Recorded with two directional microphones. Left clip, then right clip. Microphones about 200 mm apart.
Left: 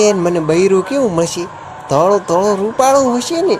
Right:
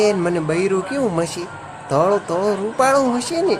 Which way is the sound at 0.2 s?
15° left (ahead or behind).